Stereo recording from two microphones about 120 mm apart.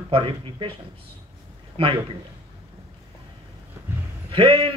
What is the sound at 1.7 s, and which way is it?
Speech, 50° right (ahead or behind).